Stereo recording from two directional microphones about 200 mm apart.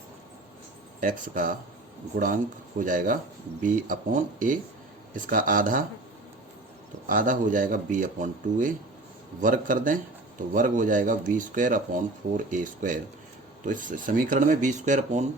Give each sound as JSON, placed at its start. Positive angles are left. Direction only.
{"t": 1.0, "sound": "speech", "side_deg": -40}
{"t": 7.1, "sound": "speech", "side_deg": -40}